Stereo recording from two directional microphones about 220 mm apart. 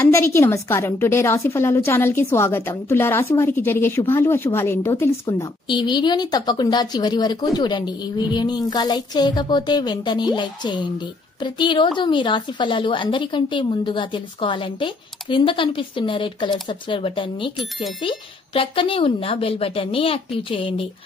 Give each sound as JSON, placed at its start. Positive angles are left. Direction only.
{"t": 0.0, "sound": "a woman's voice", "side_deg": 10}